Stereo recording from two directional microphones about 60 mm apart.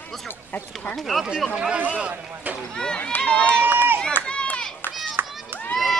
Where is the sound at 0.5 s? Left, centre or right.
Left.